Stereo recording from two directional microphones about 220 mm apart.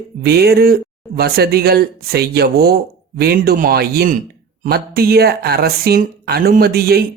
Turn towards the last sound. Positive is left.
turn(degrees=-45)  # may be behind; listen again after turning